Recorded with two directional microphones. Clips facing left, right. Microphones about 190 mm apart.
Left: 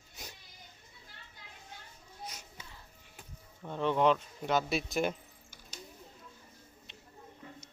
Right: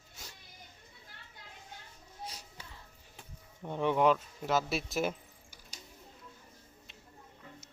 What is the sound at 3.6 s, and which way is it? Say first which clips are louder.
Speech: even; 15° right (ahead or behind).